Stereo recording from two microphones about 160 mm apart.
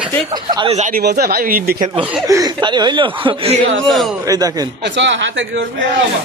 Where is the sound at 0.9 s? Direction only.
70° right (ahead or behind).